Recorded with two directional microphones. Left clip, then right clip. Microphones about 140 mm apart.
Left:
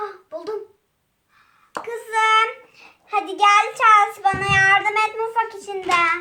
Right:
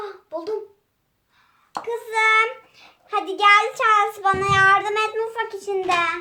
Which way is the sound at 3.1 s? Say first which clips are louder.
Even; 30° right (ahead or behind).